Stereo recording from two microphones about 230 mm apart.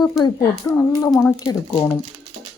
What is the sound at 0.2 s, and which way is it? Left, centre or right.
A child's voice, centre.